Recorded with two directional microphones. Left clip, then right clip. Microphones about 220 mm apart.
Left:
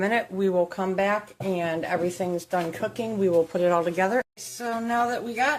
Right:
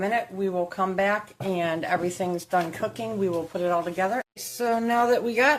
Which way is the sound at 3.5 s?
25° left (ahead or behind).